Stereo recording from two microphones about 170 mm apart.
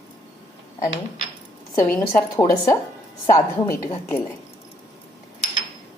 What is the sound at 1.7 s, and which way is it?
A woman's voice, 15° left (ahead or behind).